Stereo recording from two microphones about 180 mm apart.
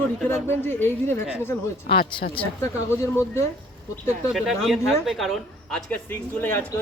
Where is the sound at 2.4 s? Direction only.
30° left (ahead or behind).